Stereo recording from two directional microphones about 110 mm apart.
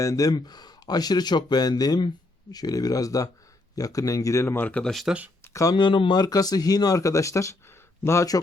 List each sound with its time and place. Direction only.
0.0 s speech: 30° left (ahead or behind)
4.8 s speech: centre (ahead or behind)
5.4 s a sound: 30° left (ahead or behind)
5.7 s speech: 45° left (ahead or behind); by 8.4 s 30° left (ahead or behind)